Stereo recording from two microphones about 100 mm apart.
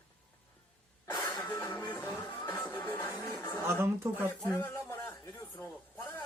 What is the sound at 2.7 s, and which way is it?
Music, 20° left (ahead or behind).